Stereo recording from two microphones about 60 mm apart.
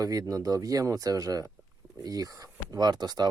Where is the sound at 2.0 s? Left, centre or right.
Right.